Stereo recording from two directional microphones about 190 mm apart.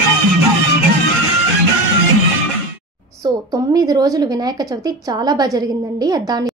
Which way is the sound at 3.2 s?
20° right (ahead or behind).